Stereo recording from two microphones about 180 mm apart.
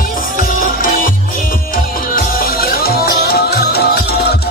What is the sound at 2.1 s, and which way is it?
Music, 55° left (ahead or behind).